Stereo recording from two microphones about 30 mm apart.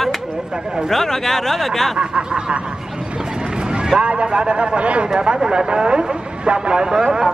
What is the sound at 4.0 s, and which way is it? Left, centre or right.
A man's voice, right.